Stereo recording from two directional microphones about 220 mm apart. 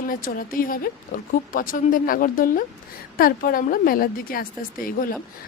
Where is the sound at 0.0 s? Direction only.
40° left (ahead or behind).